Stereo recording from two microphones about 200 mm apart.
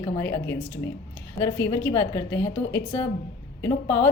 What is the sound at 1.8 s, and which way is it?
Speech, 15° left (ahead or behind).